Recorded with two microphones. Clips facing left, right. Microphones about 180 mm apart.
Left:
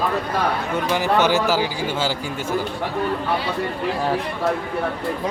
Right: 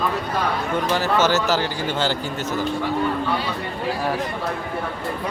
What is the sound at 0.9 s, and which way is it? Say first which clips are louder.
A man's voice: left 2 dB; 15° left (ahead or behind).